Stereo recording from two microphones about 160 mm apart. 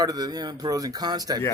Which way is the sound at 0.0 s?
25° right (ahead or behind).